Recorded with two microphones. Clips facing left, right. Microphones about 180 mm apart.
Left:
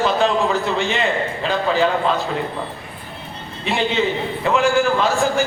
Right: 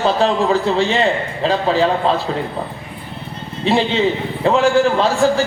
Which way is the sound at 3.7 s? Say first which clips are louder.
Right 4 dB; 30° right (ahead or behind).